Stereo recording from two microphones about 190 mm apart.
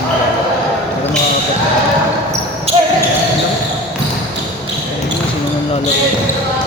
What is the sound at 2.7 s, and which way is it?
Basketball bounce, 30° right (ahead or behind).